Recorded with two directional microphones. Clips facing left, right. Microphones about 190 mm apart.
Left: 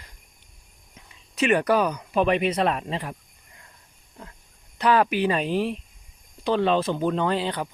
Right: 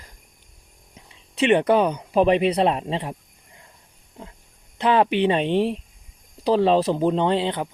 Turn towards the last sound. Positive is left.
turn(degrees=-20)  # may be behind; listen again after turning